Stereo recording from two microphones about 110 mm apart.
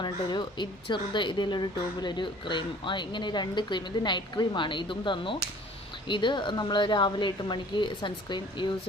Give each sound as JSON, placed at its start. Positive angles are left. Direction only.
{"t": 0.0, "sound": "speech", "side_deg": 45}